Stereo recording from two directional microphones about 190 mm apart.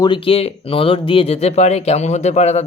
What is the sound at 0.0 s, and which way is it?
Speech, 25° left (ahead or behind).